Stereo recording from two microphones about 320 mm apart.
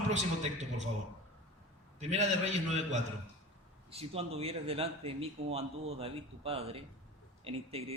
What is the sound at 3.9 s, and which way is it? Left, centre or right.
Speech, centre.